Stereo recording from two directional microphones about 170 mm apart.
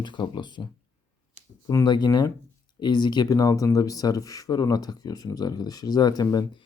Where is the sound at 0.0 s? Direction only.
25° left (ahead or behind).